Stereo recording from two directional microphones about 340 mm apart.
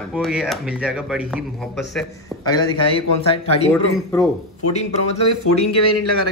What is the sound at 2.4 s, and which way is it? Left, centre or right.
Speech, centre.